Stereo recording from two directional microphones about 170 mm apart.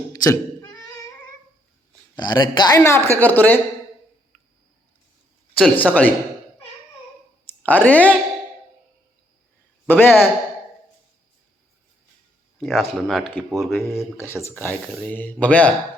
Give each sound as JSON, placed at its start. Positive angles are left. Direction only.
{"t": 0.1, "sound": "cat", "side_deg": 20}
{"t": 2.1, "sound": "speech", "side_deg": 25}
{"t": 5.5, "sound": "speech", "side_deg": 5}
{"t": 7.6, "sound": "speech", "side_deg": 10}
{"t": 9.8, "sound": "a man's voice", "side_deg": 10}
{"t": 12.5, "sound": "speech", "side_deg": 0}
{"t": 14.4, "sound": "speech", "side_deg": 10}